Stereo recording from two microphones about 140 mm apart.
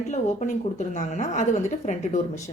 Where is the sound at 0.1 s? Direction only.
55° left (ahead or behind).